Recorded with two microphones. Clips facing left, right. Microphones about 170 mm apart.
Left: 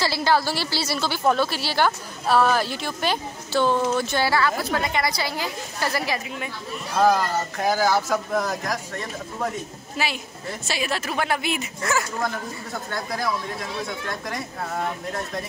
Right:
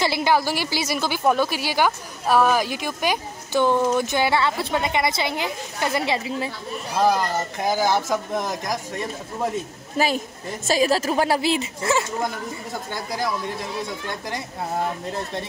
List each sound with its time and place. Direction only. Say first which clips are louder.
0.0 s speech: right 1 dB; 15° right (ahead or behind)
7.0 s speech: left 1 dB; 15° right (ahead or behind)
9.9 s a woman's voice: right 6 dB; 45° right (ahead or behind); by 12.3 s 25° right (ahead or behind)